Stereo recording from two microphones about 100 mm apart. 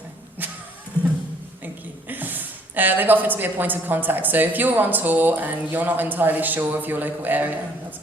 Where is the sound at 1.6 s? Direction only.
20° right (ahead or behind).